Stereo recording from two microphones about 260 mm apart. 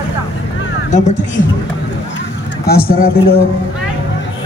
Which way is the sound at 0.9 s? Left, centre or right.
Left.